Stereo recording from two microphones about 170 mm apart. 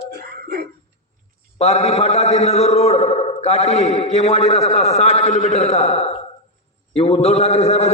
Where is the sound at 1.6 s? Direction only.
40° left (ahead or behind).